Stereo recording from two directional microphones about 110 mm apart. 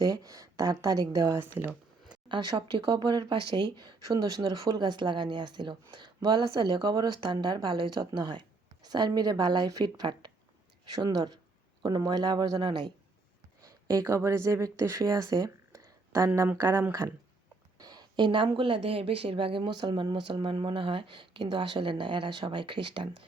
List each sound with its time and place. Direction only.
0.0 s a woman's voice: 35° right (ahead or behind)
1.4 s speech: 15° right (ahead or behind)
2.3 s a woman's voice: 50° right (ahead or behind)
13.6 s a woman's voice: 30° right (ahead or behind); by 23.0 s 50° right (ahead or behind)